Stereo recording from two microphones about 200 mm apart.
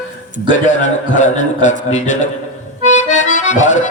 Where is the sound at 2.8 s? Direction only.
35° left (ahead or behind).